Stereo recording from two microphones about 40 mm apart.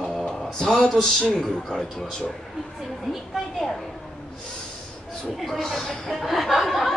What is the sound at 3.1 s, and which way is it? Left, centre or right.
Speech, centre.